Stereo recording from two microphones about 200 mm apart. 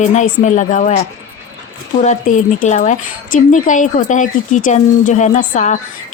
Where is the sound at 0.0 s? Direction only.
35° left (ahead or behind).